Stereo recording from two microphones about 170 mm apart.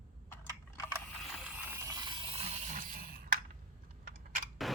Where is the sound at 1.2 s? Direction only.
10° right (ahead or behind); by 3.4 s 55° right (ahead or behind).